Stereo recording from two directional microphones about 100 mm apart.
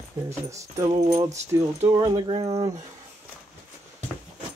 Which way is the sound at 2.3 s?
90° right.